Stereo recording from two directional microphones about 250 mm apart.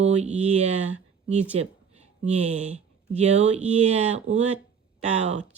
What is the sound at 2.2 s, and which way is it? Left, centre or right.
Speech, right.